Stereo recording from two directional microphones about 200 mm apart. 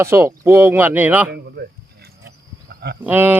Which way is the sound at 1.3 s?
55° right (ahead or behind).